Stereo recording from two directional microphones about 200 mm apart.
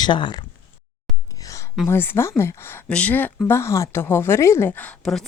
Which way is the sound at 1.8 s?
10° left (ahead or behind).